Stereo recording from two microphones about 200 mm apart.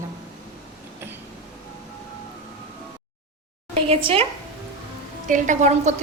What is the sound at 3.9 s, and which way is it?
Speech, 25° right (ahead or behind).